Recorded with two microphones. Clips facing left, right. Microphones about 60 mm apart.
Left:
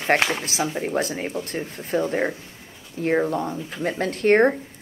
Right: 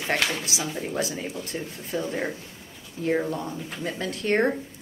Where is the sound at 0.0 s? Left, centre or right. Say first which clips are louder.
Left 5 dB; left.